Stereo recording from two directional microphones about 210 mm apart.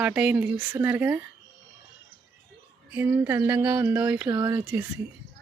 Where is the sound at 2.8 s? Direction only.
10° right (ahead or behind).